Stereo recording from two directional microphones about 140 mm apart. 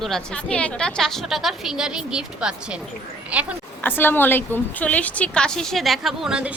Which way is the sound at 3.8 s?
15° left (ahead or behind).